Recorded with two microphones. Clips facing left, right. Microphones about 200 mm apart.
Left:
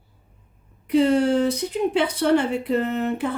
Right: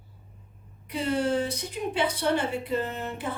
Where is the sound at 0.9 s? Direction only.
65° left (ahead or behind).